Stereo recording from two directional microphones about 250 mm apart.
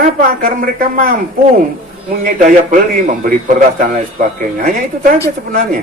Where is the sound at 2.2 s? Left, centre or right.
Right.